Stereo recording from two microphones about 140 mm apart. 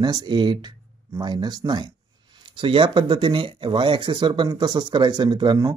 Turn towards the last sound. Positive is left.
turn(degrees=-35)  # may be behind; listen again after turning